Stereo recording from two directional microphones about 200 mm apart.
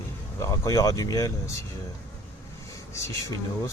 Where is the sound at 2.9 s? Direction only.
15° left (ahead or behind).